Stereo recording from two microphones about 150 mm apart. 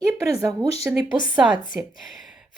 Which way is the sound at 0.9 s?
10° right (ahead or behind).